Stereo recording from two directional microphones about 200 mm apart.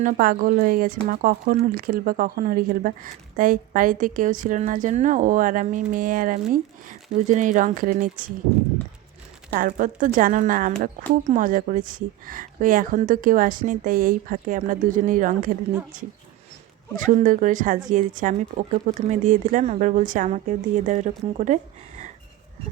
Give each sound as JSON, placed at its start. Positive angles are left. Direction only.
{"t": 0.0, "sound": "a woman's voice", "side_deg": -45}
{"t": 9.6, "sound": "a woman's voice", "side_deg": -40}
{"t": 17.0, "sound": "speech", "side_deg": -40}